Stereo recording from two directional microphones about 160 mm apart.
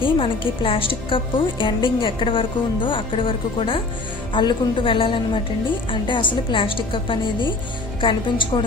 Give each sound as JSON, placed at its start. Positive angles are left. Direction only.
{"t": 0.0, "sound": "a woman's voice", "side_deg": 30}